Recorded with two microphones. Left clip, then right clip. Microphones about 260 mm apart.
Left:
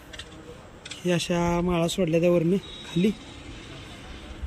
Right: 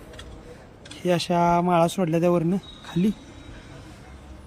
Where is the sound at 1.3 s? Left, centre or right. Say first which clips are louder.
Right 6 dB; centre.